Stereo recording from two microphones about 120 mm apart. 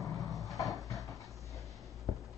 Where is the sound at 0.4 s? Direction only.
Centre (ahead or behind).